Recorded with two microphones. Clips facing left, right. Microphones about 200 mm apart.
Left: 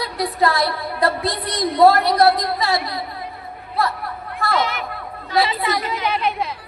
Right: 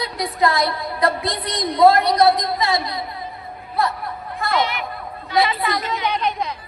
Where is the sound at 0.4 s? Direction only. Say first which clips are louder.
Right 1 dB; 20° right (ahead or behind).